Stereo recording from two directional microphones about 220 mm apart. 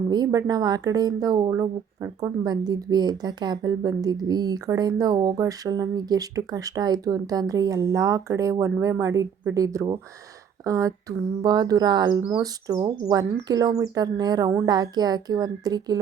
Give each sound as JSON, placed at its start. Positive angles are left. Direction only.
{"t": 0.1, "sound": "speech", "side_deg": -15}